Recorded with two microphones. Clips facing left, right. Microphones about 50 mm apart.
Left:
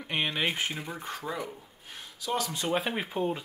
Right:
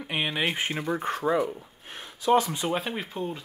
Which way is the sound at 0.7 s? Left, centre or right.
Right.